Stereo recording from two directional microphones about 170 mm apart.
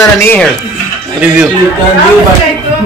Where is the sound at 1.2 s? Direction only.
5° right (ahead or behind).